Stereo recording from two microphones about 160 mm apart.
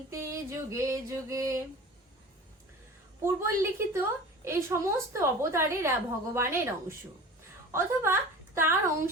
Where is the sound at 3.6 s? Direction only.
15° right (ahead or behind).